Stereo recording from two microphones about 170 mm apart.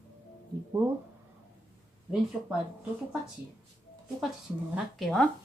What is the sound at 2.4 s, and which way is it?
Speech, 15° right (ahead or behind).